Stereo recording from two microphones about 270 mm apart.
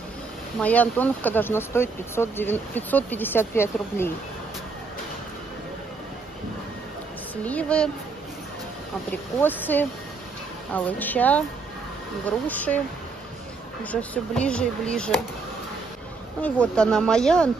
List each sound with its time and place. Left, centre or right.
0.6 s speech: centre
7.4 s speech: centre
9.1 s speech: centre
13.8 s speech: centre
16.3 s speech: centre